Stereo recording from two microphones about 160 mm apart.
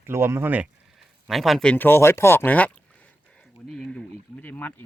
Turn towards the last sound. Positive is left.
turn(degrees=10)  # may be behind; listen again after turning